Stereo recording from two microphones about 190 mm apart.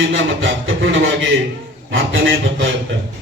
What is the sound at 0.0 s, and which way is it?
A man's voice, 80° right.